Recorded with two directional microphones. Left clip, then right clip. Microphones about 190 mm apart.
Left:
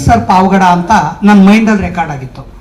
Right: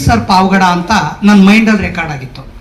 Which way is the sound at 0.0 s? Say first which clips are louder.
Left 2 dB; 50° left (ahead or behind).